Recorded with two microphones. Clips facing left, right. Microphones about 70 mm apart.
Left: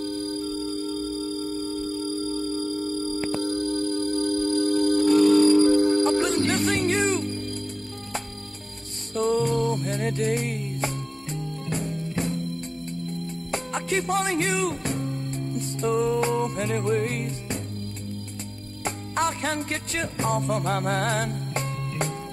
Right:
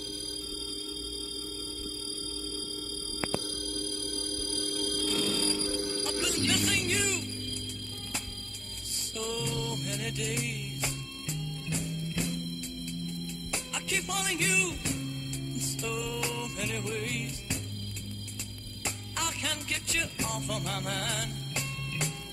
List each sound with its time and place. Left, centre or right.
0.0 s music: left
9.1 s music: left
18.9 s music: left